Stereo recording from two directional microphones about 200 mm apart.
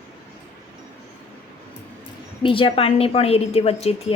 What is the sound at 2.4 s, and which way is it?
A woman's voice, 25° left (ahead or behind).